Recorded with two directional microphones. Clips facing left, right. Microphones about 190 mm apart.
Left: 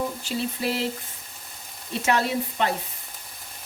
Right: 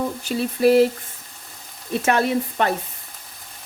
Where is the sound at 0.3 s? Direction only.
55° right (ahead or behind).